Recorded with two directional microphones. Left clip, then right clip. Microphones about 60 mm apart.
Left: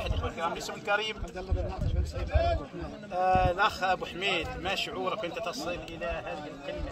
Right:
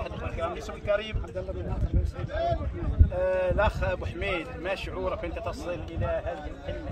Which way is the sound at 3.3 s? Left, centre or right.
Right.